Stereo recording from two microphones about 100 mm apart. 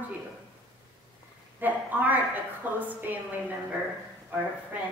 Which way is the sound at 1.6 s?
15° right (ahead or behind).